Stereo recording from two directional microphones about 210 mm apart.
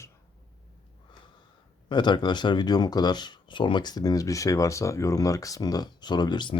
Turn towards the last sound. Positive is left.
turn(degrees=20)  # may be behind; listen again after turning